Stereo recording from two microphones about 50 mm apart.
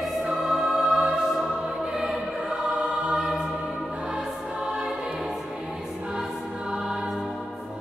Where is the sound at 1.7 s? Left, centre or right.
Centre.